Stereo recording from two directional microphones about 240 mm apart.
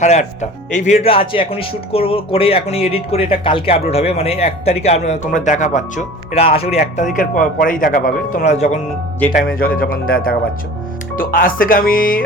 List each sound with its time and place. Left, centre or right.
0.0 s speech: left